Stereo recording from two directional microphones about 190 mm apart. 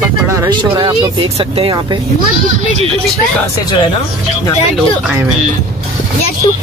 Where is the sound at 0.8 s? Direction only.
30° right (ahead or behind).